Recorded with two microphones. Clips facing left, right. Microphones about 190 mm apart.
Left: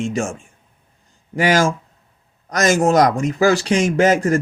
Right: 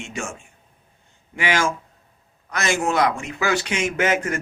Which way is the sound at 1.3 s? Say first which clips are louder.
Left 6 dB; 40° left (ahead or behind).